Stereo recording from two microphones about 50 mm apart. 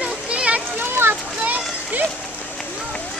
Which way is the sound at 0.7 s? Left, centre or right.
Right.